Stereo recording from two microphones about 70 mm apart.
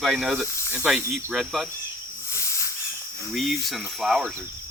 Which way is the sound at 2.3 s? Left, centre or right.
Left.